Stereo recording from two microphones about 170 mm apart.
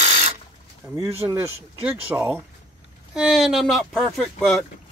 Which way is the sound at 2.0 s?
10° right (ahead or behind).